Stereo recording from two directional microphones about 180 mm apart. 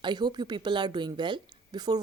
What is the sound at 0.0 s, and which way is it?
A woman's voice, 25° right (ahead or behind).